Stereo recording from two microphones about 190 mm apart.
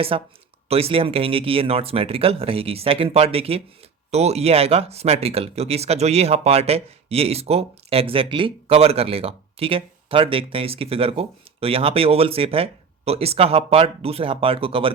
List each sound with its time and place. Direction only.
0.1 s speech: 30° right (ahead or behind)